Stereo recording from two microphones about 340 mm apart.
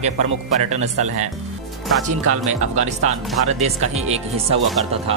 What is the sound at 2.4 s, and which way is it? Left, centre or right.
Speech, centre.